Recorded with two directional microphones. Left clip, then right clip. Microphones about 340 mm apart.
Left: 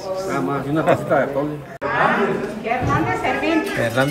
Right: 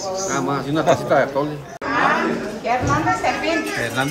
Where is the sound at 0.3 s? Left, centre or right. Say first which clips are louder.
Even; centre.